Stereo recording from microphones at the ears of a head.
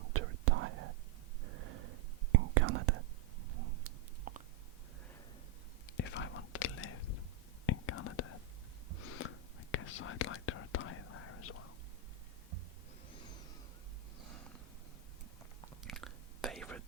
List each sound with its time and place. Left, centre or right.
0.0 s whispering: right
3.5 s a sound: right
5.8 s whispering: left